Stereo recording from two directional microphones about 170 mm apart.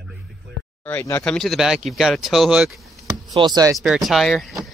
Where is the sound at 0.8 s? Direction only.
15° left (ahead or behind); by 2.8 s 5° right (ahead or behind).